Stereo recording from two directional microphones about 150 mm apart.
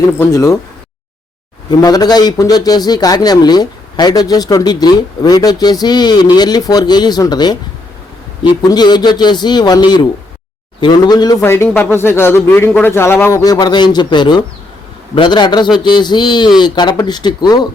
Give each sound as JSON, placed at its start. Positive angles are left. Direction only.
{"t": 0.2, "sound": "a man's voice", "side_deg": 20}
{"t": 1.8, "sound": "a man's voice", "side_deg": 25}
{"t": 8.7, "sound": "a man's voice", "side_deg": 25}
{"t": 11.4, "sound": "a man's voice", "side_deg": 15}